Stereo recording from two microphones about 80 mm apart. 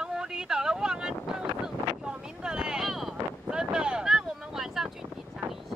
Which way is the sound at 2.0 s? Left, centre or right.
Centre.